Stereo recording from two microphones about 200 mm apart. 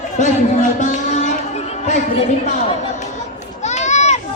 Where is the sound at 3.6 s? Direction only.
35° left (ahead or behind).